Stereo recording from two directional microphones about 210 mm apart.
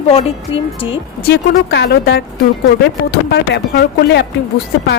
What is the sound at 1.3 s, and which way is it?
Speech, 50° left (ahead or behind).